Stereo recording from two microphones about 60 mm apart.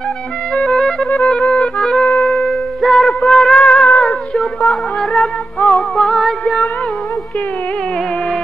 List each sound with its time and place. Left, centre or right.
0.6 s music: centre
2.8 s music: centre
3.5 s music: centre
4.6 s music: centre
5.6 s music: left
5.9 s music: centre